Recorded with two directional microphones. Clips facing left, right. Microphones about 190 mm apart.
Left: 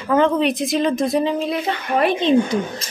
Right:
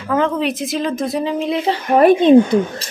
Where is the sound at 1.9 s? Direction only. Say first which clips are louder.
Right 8 dB; 45° right (ahead or behind).